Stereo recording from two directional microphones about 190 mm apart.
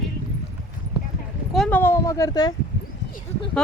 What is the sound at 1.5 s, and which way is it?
Speech, 5° left (ahead or behind).